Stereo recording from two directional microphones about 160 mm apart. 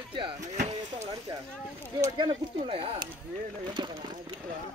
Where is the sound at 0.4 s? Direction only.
45° right (ahead or behind).